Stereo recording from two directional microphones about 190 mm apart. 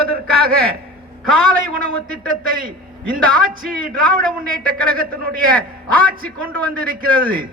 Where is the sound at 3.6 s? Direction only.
50° right (ahead or behind).